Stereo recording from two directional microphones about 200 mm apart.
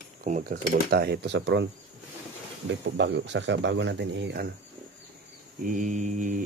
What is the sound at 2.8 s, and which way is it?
Speech, 60° right (ahead or behind).